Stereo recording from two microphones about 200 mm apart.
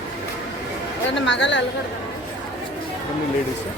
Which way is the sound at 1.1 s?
65° left (ahead or behind).